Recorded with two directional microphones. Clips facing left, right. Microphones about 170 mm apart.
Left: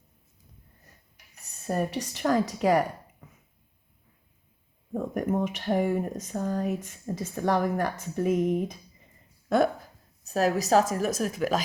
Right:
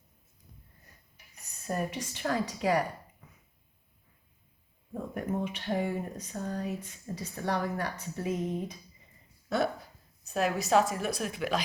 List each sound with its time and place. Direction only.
1.6 s speech: 35° left (ahead or behind)
5.3 s speech: 50° left (ahead or behind)
8.4 s speech: 15° left (ahead or behind)
9.5 s a woman's voice: 50° left (ahead or behind)